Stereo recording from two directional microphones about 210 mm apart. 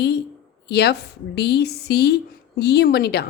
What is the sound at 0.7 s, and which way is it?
Speech, 50° left (ahead or behind).